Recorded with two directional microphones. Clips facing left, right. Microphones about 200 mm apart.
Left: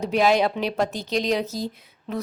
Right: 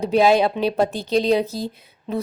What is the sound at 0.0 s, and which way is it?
A woman's voice, 30° right (ahead or behind).